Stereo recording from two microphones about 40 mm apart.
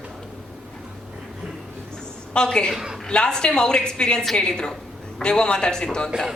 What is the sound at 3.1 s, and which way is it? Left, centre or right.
Speech, left.